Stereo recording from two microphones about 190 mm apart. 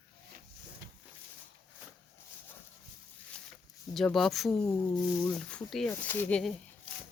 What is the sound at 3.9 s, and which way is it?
Speech, centre (ahead or behind).